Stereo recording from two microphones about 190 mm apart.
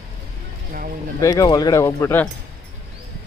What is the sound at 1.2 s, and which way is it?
Speech, 15° left (ahead or behind).